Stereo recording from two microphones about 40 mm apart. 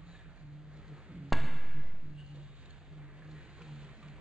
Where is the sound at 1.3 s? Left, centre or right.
Centre.